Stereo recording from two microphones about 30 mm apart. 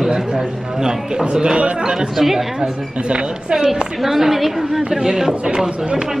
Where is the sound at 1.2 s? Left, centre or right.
Right.